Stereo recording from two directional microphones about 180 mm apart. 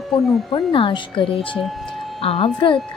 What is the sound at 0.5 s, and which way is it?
Speech, 30° left (ahead or behind).